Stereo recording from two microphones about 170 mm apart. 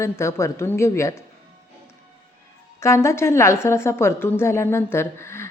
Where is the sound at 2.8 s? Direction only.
15° left (ahead or behind).